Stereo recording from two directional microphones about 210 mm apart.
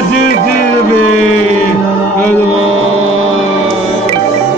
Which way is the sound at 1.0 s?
90° right.